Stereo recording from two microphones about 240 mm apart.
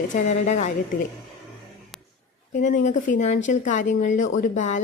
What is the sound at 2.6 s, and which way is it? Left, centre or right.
A woman's voice, left.